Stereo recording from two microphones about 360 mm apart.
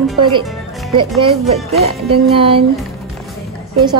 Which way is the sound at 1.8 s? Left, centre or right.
Centre.